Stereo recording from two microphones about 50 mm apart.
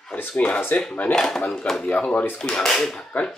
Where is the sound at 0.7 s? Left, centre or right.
Left.